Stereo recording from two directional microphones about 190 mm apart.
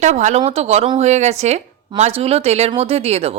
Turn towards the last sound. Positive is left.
turn(degrees=-30)  # may be behind; listen again after turning